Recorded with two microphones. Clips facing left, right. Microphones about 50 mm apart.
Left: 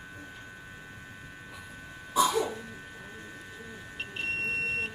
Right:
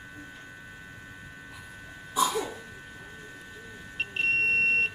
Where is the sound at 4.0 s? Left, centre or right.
Right.